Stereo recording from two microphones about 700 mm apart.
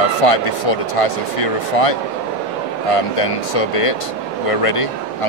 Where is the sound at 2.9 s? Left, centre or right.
Left.